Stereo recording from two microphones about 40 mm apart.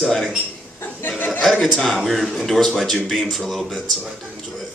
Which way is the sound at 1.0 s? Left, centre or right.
Left.